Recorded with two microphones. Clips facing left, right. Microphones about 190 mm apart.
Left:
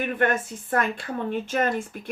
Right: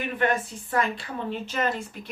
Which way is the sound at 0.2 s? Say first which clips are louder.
Right 1 dB; 50° left (ahead or behind).